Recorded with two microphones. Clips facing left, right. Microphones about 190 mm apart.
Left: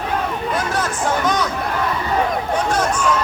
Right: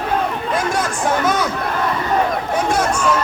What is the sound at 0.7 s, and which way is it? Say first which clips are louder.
Speech: right 1 dB; 10° right (ahead or behind).